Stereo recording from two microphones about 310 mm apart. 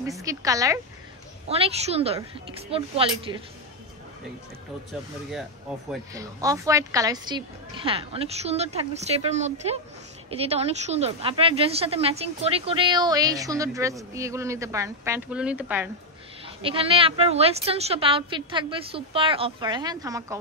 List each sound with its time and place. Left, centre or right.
0.0 s a woman's voice: centre
5.9 s a woman's voice: centre
16.4 s a woman's voice: centre